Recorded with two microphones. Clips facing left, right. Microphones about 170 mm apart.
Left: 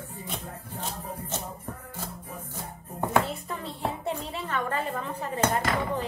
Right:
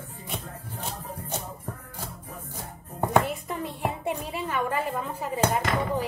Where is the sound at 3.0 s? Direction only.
15° right (ahead or behind).